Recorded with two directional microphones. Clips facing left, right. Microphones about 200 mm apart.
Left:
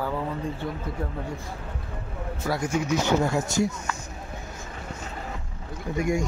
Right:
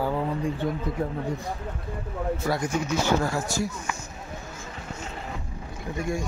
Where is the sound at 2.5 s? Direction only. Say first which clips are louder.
Left 4 dB; 10° left (ahead or behind).